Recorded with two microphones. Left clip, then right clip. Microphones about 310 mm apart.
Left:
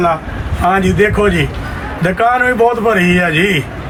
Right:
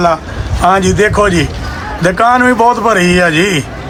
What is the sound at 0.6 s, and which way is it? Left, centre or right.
A man's voice, centre.